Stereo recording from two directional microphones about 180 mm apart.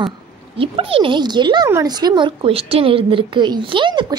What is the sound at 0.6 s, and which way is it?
A woman's voice, 30° right (ahead or behind).